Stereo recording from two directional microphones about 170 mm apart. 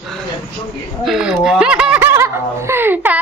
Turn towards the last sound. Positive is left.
turn(degrees=-10)  # may be behind; listen again after turning